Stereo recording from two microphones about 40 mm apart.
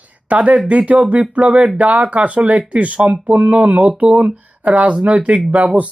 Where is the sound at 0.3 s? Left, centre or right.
Right.